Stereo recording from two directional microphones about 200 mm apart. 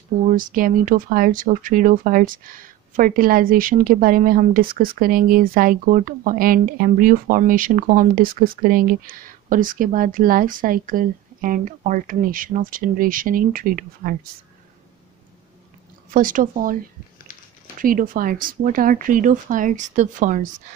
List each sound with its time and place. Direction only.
0.3 s speech: 45° right (ahead or behind)
16.1 s speech: 45° right (ahead or behind)
17.7 s speech: 45° right (ahead or behind)